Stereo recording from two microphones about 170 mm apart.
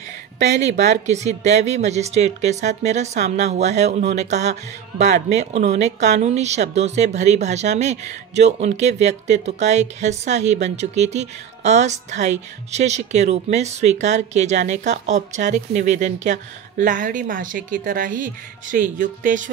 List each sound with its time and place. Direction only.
0.4 s speech: 45° right (ahead or behind)